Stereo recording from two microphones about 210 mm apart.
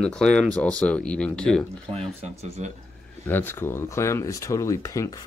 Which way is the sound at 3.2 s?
10° left (ahead or behind).